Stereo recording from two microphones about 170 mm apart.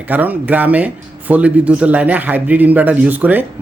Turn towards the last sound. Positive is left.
turn(degrees=-10)  # may be behind; listen again after turning